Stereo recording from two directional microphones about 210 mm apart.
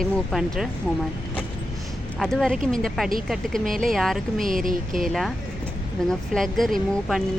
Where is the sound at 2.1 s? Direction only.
Centre (ahead or behind).